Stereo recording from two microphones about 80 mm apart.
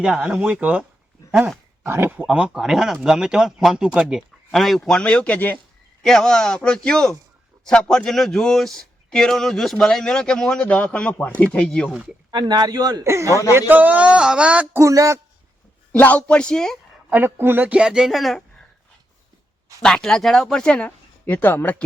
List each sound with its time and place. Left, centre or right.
0.0 s speech: centre
1.9 s speech: right
2.2 s speech: centre
4.8 s a man's voice: centre
11.9 s speech: centre
12.3 s speech: right
13.1 s speech: right
13.5 s speech: right
14.7 s speech: right
15.9 s a man's voice: centre
17.1 s speech: right
17.7 s speech: centre
19.8 s a man's voice: centre